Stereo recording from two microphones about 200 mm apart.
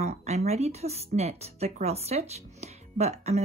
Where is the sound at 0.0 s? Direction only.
35° right (ahead or behind).